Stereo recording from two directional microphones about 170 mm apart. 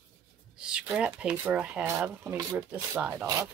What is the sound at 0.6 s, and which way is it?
Speech, 5° right (ahead or behind).